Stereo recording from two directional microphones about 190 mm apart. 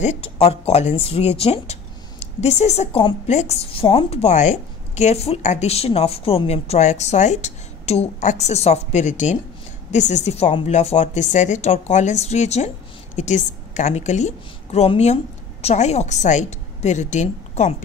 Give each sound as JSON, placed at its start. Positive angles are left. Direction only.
{"t": 0.0, "sound": "a woman's voice", "side_deg": 35}